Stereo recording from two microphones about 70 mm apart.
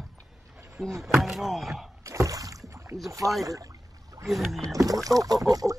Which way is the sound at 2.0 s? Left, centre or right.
Right.